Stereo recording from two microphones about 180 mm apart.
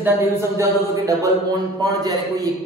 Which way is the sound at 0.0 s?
15° right (ahead or behind).